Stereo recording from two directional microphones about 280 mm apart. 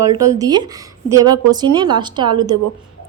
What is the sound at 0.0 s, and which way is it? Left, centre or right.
A woman's voice, centre.